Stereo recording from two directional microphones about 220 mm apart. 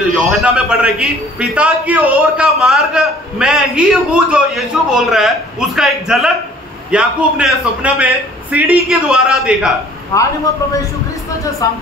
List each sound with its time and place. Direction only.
0.1 s a man's voice: 5° right (ahead or behind)
10.1 s speech: 15° left (ahead or behind)
11.6 s speech: 15° left (ahead or behind)